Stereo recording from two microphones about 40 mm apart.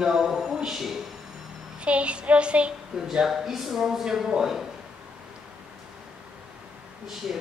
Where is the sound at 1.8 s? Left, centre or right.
Right.